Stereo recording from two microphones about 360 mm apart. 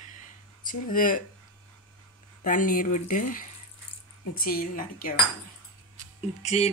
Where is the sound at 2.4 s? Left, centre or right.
Left.